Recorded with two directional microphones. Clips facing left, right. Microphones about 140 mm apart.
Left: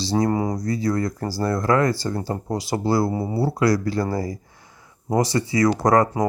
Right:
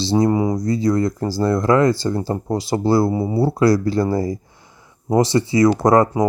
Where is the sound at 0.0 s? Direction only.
25° right (ahead or behind).